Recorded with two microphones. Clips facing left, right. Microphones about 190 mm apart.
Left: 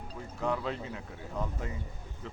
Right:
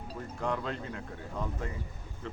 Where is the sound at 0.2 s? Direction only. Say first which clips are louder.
Left 1 dB; 5° left (ahead or behind).